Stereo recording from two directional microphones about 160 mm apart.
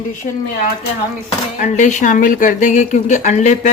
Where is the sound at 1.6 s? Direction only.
50° left (ahead or behind).